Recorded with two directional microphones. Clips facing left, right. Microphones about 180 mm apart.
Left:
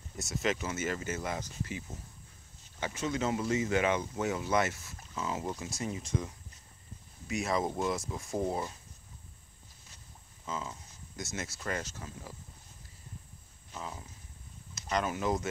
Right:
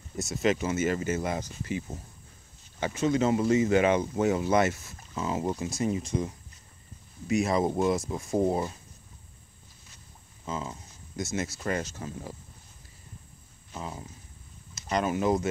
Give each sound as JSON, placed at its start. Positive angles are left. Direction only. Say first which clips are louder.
{"t": 0.4, "sound": "speech", "louder": "right 7 dB", "side_deg": -20}
{"t": 2.8, "sound": "speech", "louder": "right 7 dB", "side_deg": -25}
{"t": 7.2, "sound": "speech", "louder": "right 6 dB", "side_deg": -25}
{"t": 10.4, "sound": "speech", "louder": "right 4 dB", "side_deg": -25}
{"t": 12.0, "sound": "speech", "louder": "right 7 dB", "side_deg": -35}
{"t": 13.7, "sound": "speech", "louder": "right 4 dB", "side_deg": -25}